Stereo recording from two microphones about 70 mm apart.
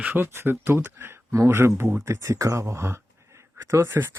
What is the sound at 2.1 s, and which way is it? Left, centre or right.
Speech, right.